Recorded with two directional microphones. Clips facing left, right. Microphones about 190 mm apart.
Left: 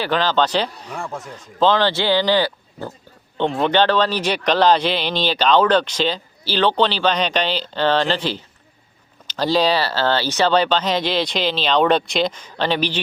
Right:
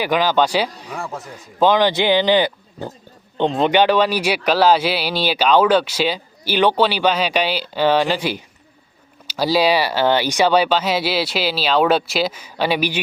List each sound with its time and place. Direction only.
0.0 s speech: 10° right (ahead or behind)